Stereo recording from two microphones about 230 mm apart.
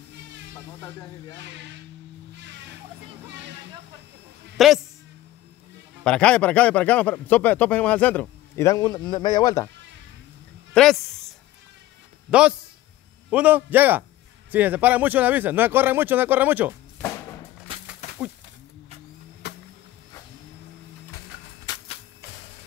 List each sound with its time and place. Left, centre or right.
4.6 s a man's voice: centre
6.0 s speech: centre
10.7 s speech: centre
12.3 s a man's voice: centre
18.0 s a sound: left
19.4 s music: left
21.6 s music: left